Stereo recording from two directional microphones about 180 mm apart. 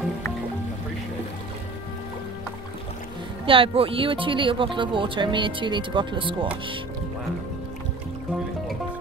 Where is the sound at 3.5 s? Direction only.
30° right (ahead or behind).